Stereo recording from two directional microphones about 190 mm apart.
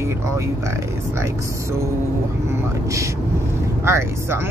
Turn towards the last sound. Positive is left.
turn(degrees=-15)  # may be behind; listen again after turning